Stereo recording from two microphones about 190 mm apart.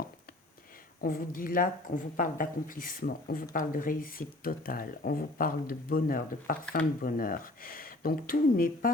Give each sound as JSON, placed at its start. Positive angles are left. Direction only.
{"t": 1.0, "sound": "speech", "side_deg": 50}